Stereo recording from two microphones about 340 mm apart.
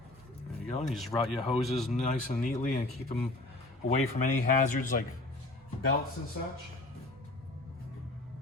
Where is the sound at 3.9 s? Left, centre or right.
Centre.